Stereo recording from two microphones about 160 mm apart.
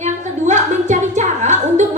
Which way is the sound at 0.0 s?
50° right (ahead or behind).